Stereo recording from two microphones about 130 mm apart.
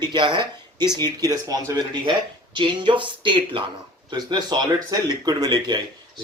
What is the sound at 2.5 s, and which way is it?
Speech, 40° right (ahead or behind).